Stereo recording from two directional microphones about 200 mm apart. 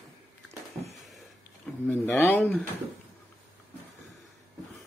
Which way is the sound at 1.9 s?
10° left (ahead or behind).